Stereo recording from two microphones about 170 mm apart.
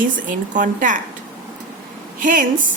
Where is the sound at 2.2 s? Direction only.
50° right (ahead or behind).